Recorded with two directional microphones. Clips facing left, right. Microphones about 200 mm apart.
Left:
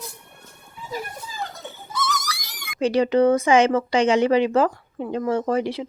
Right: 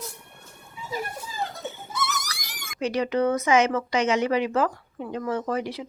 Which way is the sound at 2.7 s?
30° left (ahead or behind).